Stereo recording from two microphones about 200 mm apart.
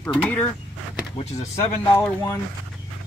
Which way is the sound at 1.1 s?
15° left (ahead or behind).